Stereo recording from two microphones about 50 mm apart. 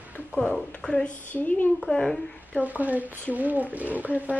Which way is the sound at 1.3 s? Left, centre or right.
Left.